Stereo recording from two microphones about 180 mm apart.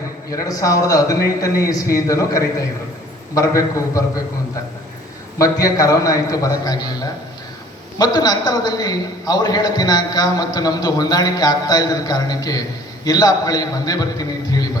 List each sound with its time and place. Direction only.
0.3 s a man's voice: 20° left (ahead or behind)
5.4 s a man's voice: 20° left (ahead or behind)